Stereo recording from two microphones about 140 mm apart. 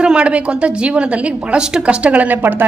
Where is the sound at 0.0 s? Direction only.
5° right (ahead or behind).